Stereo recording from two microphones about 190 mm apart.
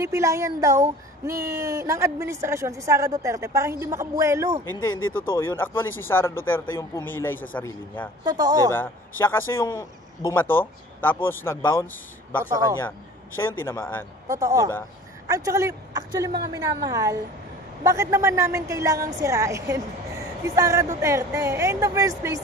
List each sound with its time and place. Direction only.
0.0 s speech: 15° right (ahead or behind)
5.4 s speech: 10° left (ahead or behind)
8.3 s a woman's voice: 20° right (ahead or behind)
8.7 s speech: 10° left (ahead or behind)
14.2 s a woman's voice: 15° right (ahead or behind)